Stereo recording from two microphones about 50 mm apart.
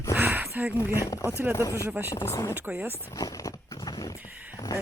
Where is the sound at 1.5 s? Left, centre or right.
Left.